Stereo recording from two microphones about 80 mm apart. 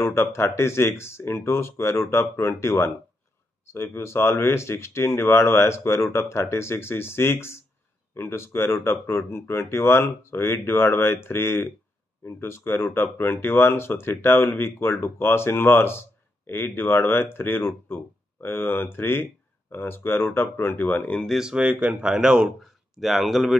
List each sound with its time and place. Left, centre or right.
0.0 s speech: left
21.1 s speech: centre
21.4 s speech: centre